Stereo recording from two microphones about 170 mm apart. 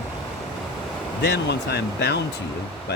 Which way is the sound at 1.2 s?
80° left.